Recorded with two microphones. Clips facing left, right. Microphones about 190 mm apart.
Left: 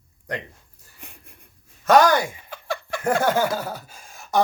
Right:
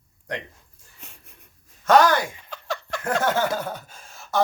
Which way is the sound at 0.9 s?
15° left (ahead or behind).